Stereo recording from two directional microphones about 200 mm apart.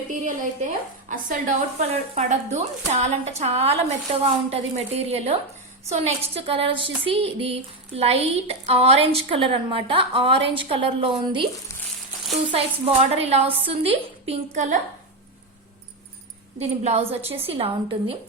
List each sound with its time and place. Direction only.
0.1 s a woman's voice: 40° right (ahead or behind)
12.5 s speech: 30° right (ahead or behind)
16.6 s a woman's voice: 30° right (ahead or behind)